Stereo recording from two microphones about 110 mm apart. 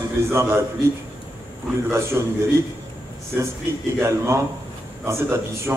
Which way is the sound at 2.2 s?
25° right (ahead or behind).